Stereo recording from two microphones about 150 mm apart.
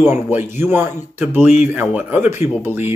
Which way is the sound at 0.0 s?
15° right (ahead or behind).